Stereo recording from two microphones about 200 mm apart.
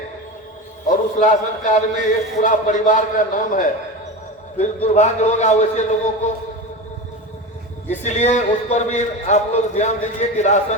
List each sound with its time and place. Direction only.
0.9 s a man's voice: 40° left (ahead or behind)
4.9 s a man's voice: 35° left (ahead or behind)
7.9 s a man's voice: 35° left (ahead or behind)